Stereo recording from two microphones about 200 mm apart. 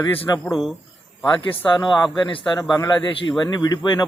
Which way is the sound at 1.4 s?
25° left (ahead or behind).